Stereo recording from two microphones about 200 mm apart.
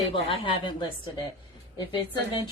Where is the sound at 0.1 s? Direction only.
25° left (ahead or behind).